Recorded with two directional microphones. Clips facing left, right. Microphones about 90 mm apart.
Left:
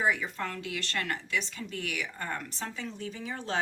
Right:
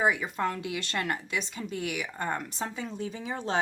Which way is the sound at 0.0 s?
20° right (ahead or behind).